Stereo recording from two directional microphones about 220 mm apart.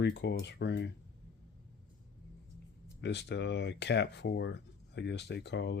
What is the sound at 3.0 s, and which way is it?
Speech, 50° left (ahead or behind).